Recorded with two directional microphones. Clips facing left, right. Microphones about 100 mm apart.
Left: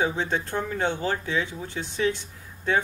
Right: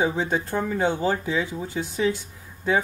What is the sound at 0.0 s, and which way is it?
Speech, 10° right (ahead or behind).